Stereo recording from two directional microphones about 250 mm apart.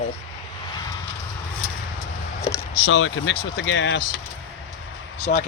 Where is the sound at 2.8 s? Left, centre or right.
Left.